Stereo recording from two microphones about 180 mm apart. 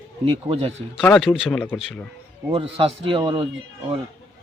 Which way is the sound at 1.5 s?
10° left (ahead or behind).